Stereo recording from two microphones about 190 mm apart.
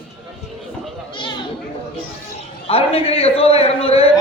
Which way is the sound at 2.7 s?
30° left (ahead or behind).